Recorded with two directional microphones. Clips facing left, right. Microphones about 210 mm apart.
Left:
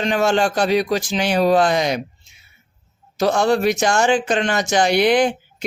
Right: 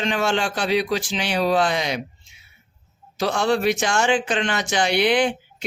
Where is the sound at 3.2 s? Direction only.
45° left (ahead or behind).